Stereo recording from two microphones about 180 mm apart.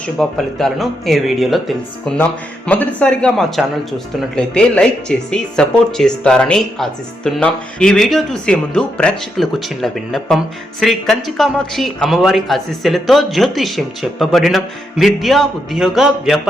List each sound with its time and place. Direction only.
0.2 s speech: centre (ahead or behind)